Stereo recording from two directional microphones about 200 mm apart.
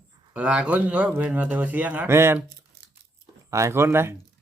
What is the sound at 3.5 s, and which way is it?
Speech, 15° right (ahead or behind).